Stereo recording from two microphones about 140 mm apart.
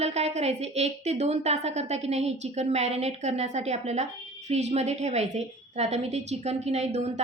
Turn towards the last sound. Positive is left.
turn(degrees=-50)  # may be behind; listen again after turning